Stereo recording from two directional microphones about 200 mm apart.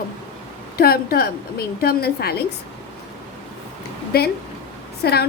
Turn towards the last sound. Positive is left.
turn(degrees=50)  # may be behind; listen again after turning